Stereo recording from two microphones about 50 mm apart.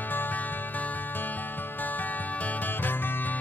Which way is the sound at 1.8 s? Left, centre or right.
Left.